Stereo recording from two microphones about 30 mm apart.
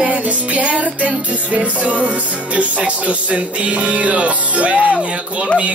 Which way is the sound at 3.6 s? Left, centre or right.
Right.